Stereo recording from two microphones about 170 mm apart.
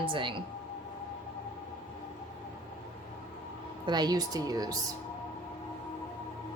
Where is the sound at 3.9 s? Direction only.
25° right (ahead or behind).